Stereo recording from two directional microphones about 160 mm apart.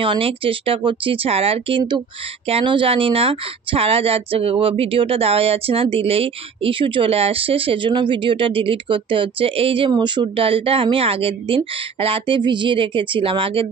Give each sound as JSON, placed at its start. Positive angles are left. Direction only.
{"t": 0.0, "sound": "speech", "side_deg": -35}